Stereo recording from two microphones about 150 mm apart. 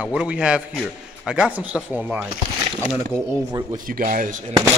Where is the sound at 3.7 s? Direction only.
70° right (ahead or behind).